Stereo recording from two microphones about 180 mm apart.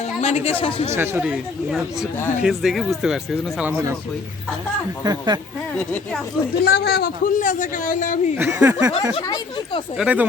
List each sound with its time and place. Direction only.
0.2 s a woman's voice: 35° left (ahead or behind)
0.9 s speech: 10° right (ahead or behind)
5.0 s speech: 25° right (ahead or behind)
6.7 s a man's voice: 60° left (ahead or behind)
8.4 s speech: 10° right (ahead or behind)
9.2 s speech: 20° left (ahead or behind)
10.0 s speech: 10° right (ahead or behind)